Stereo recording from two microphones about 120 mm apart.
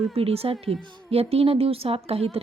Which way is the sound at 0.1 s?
55° right (ahead or behind).